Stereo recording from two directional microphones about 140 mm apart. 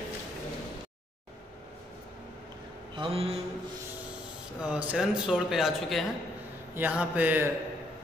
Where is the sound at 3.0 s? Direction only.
45° right (ahead or behind).